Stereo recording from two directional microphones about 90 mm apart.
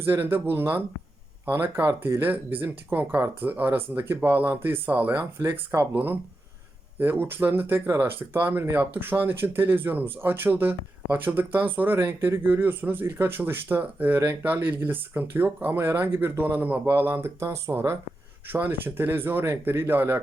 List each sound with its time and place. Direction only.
0.0 s speech: 25° right (ahead or behind)